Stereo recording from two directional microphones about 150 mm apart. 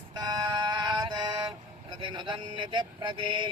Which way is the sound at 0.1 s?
25° right (ahead or behind).